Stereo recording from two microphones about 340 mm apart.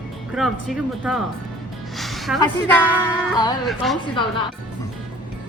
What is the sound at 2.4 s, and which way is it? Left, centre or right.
Speech, centre.